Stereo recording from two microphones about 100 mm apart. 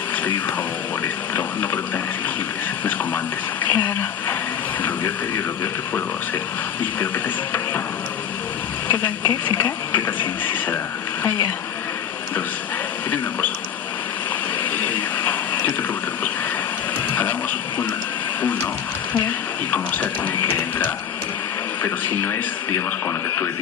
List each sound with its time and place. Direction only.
1.0 s speech: 20° left (ahead or behind)
3.6 s speech: 20° left (ahead or behind)
8.8 s a sound: 20° left (ahead or behind)
14.8 s water: 20° left (ahead or behind)
17.2 s music: 20° left (ahead or behind)
18.4 s a sound: 15° left (ahead or behind)
19.7 s music: 15° left (ahead or behind)